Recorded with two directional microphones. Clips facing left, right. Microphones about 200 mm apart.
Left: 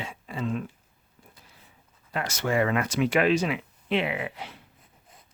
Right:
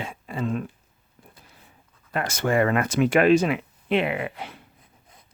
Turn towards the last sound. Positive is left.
turn(degrees=-55)  # may be behind; listen again after turning